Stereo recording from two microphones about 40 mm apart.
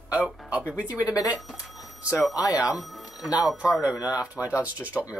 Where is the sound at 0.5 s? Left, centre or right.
Right.